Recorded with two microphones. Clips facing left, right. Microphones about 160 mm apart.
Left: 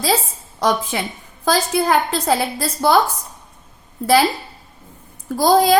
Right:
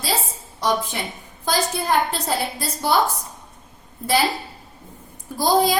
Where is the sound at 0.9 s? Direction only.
90° left.